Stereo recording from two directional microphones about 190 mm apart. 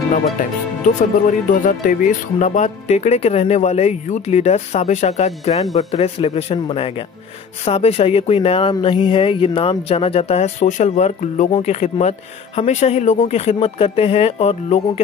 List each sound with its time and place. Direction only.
0.1 s speech: 45° left (ahead or behind)